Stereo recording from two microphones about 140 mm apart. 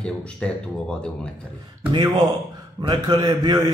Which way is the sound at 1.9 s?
25° right (ahead or behind).